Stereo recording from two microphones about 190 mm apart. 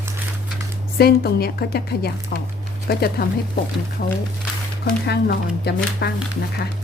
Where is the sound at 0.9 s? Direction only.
55° left (ahead or behind).